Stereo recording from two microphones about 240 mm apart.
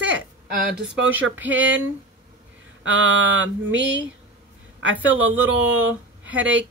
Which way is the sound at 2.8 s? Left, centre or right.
Right.